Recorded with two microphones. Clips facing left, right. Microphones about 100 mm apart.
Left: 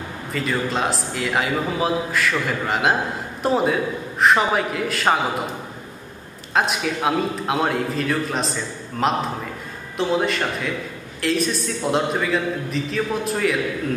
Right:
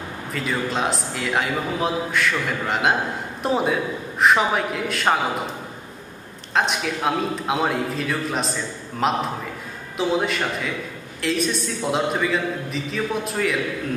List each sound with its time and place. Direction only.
0.3 s a man's voice: centre (ahead or behind)
6.5 s a man's voice: centre (ahead or behind)